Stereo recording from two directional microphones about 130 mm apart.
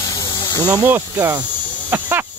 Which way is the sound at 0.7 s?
15° right (ahead or behind).